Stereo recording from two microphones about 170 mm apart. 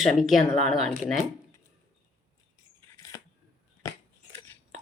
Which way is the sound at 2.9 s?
20° left (ahead or behind).